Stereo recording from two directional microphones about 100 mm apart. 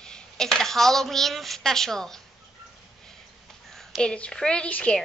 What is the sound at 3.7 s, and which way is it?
A woman's voice, 5° left (ahead or behind).